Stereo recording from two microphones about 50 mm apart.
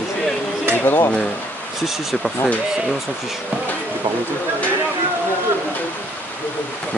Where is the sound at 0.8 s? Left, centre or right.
Left.